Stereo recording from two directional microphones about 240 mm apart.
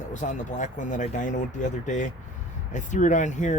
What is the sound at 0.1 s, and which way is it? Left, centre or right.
Speech, left.